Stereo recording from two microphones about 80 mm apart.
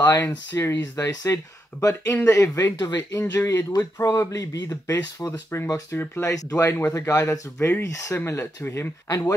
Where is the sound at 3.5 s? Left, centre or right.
Left.